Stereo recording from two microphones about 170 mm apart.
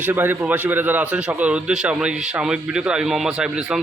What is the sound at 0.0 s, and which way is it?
A man's voice, 10° right (ahead or behind).